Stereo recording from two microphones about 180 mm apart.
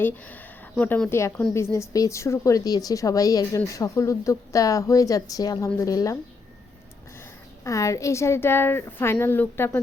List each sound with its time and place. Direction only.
0.0 s a woman's voice: 10° left (ahead or behind)
7.6 s a woman's voice: 15° left (ahead or behind)